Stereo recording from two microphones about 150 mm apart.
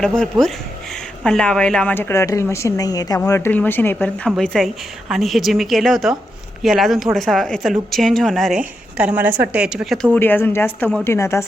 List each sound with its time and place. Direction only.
0.2 s a woman's voice: 5° left (ahead or behind)
10.2 s a woman's voice: 15° left (ahead or behind)